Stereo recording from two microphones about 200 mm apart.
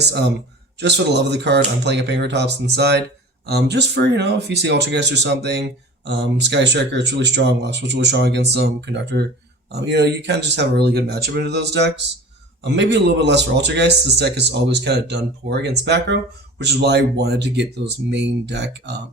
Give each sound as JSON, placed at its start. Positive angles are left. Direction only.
{"t": 0.1, "sound": "speech", "side_deg": -60}